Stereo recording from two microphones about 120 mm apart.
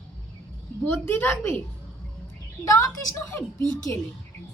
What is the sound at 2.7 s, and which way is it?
Speech, 25° left (ahead or behind).